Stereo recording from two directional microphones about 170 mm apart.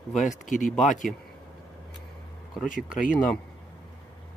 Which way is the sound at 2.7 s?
50° left (ahead or behind).